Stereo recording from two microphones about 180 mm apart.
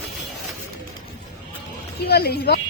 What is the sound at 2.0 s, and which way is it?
Speech, 60° left (ahead or behind).